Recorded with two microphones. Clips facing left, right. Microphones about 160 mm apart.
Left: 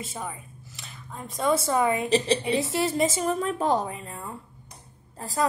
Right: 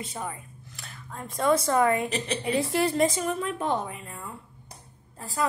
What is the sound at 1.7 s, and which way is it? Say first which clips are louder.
Speech: right 1 dB; 5° left (ahead or behind).